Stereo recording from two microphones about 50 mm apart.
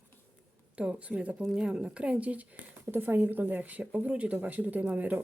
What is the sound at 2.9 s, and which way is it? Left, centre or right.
Speech, right.